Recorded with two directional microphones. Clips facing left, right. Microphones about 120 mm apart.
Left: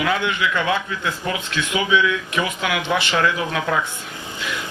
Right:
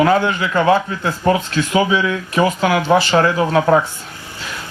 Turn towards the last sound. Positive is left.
turn(degrees=-40)  # may be behind; listen again after turning